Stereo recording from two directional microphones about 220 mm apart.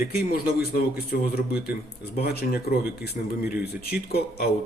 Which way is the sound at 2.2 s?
45° left (ahead or behind).